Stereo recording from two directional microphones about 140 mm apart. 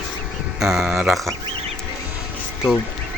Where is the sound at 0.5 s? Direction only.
5° right (ahead or behind).